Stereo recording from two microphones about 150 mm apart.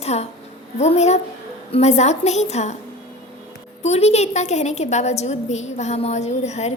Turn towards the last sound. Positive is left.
turn(degrees=50)  # may be behind; listen again after turning